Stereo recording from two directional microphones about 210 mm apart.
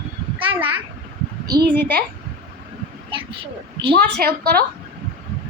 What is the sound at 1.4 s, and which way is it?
Speech, 45° right (ahead or behind).